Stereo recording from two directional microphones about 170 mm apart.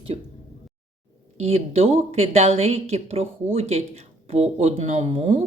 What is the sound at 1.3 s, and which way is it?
A woman's voice, 35° right (ahead or behind).